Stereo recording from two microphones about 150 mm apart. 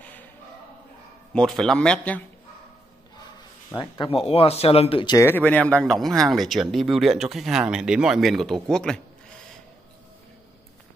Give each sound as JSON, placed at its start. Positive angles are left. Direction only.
{"t": 1.3, "sound": "speech", "side_deg": 5}
{"t": 3.7, "sound": "speech", "side_deg": 35}
{"t": 5.1, "sound": "speech", "side_deg": 15}